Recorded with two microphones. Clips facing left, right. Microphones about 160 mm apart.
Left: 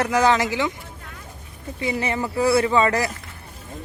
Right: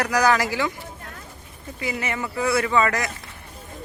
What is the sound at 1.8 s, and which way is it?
A man's voice, 30° left (ahead or behind).